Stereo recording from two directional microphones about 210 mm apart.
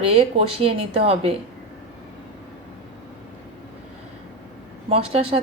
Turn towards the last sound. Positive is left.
turn(degrees=-30)  # may be behind; listen again after turning